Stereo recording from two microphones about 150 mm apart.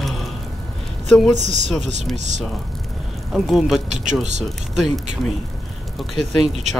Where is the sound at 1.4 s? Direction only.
50° right (ahead or behind).